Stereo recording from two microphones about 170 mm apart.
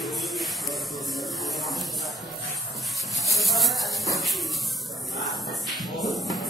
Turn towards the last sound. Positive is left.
turn(degrees=0)  # may be behind; listen again after turning